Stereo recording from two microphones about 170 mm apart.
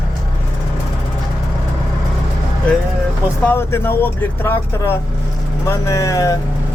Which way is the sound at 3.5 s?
15° left (ahead or behind).